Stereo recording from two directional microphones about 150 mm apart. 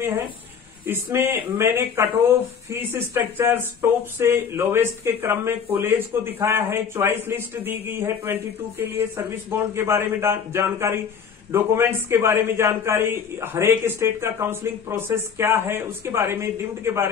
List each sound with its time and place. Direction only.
0.8 s speech: 15° right (ahead or behind)